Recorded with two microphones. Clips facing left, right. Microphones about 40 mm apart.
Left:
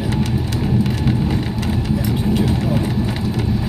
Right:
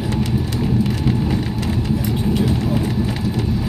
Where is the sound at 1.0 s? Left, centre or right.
Centre.